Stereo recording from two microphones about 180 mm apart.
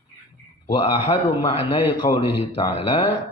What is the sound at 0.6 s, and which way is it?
A man's voice, 30° left (ahead or behind).